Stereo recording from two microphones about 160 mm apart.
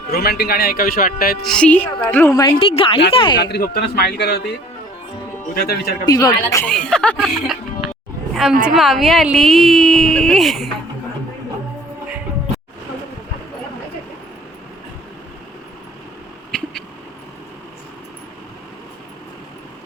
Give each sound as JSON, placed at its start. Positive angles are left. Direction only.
{"t": 0.1, "sound": "speech", "side_deg": 80}
{"t": 1.4, "sound": "speech", "side_deg": 5}
{"t": 2.6, "sound": "a woman's voice", "side_deg": 35}
{"t": 3.4, "sound": "speech", "side_deg": 80}
{"t": 5.5, "sound": "speech", "side_deg": 75}
{"t": 6.1, "sound": "a woman's voice", "side_deg": 20}
{"t": 6.7, "sound": "speech", "side_deg": 5}
{"t": 8.3, "sound": "a sound", "side_deg": 0}
{"t": 8.6, "sound": "speech", "side_deg": 0}
{"t": 16.5, "sound": "a sound", "side_deg": 5}